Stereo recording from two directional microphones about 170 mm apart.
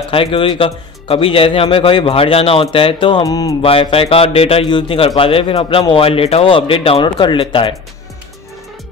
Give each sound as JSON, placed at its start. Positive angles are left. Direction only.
{"t": 0.1, "sound": "a man's voice", "side_deg": 30}
{"t": 3.6, "sound": "a man's voice", "side_deg": 35}